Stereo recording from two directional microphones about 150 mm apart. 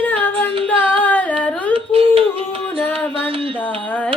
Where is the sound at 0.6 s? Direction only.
10° left (ahead or behind).